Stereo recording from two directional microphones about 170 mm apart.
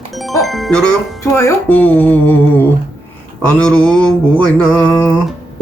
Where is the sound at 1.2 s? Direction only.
15° left (ahead or behind).